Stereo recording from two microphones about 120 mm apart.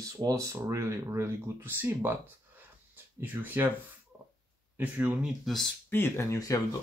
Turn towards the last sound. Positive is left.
turn(degrees=25)  # may be behind; listen again after turning